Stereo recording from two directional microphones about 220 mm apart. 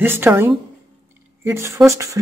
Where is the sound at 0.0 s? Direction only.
10° right (ahead or behind).